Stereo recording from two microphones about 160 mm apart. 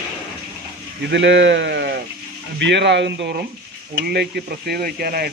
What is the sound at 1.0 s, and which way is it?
A man's voice, 90° right.